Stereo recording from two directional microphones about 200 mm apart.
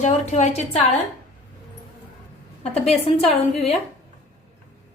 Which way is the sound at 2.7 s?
30° left (ahead or behind).